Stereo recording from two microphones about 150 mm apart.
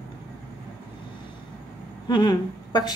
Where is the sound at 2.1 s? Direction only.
30° left (ahead or behind).